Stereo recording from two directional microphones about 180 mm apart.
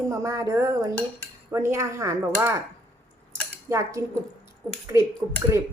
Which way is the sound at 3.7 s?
15° right (ahead or behind).